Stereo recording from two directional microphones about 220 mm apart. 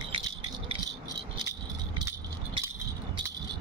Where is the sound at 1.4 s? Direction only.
15° right (ahead or behind).